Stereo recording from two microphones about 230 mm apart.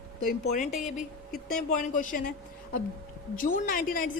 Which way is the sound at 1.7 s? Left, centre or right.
Left.